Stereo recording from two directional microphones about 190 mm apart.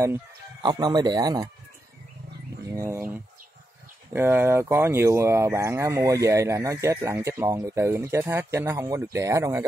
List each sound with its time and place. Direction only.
0.0 s speech: 20° right (ahead or behind)
2.6 s speech: 15° right (ahead or behind)